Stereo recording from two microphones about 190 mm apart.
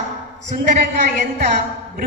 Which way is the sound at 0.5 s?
40° right (ahead or behind).